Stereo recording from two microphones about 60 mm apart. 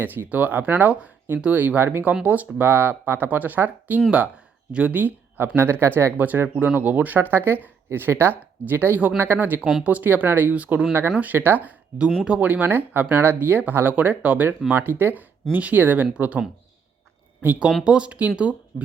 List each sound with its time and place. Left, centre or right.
0.3 s speech: right
2.2 s speech: right
6.1 s speech: right
10.5 s speech: right
17.8 s speech: centre